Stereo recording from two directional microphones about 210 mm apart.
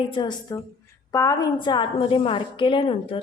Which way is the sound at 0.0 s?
25° left (ahead or behind).